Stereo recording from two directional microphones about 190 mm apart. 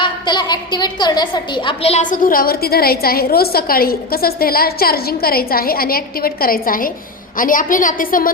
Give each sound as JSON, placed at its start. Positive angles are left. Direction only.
{"t": 0.0, "sound": "a woman's voice", "side_deg": 25}